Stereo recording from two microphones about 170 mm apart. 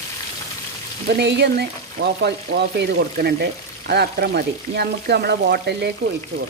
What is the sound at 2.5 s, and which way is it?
Frying, 90° right.